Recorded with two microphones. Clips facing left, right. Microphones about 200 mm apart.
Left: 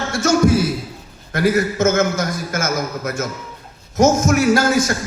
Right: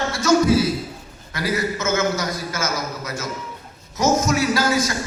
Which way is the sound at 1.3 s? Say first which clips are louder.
Left 6 dB; 50° left (ahead or behind).